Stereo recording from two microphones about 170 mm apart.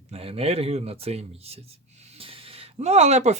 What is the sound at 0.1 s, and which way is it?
Speech, 35° right (ahead or behind).